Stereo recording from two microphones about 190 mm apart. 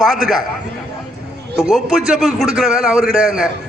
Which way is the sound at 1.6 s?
Centre (ahead or behind).